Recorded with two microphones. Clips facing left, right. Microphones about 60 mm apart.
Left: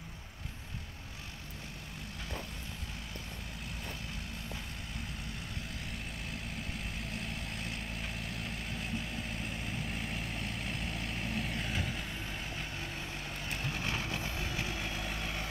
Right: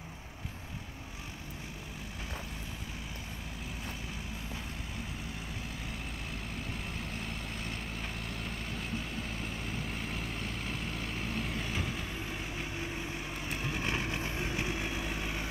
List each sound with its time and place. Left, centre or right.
5.9 s vehicle: centre
13.5 s vehicle: centre